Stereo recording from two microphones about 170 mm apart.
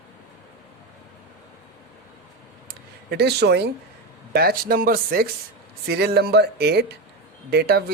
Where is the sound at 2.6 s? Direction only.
70° right (ahead or behind).